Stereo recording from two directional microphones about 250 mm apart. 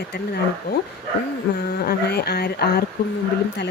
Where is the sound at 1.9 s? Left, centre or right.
Left.